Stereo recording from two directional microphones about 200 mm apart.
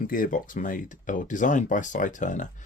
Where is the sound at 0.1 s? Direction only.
45° left (ahead or behind).